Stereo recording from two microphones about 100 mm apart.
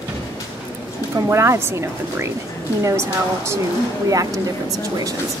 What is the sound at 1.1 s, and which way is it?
A woman's voice, 30° right (ahead or behind).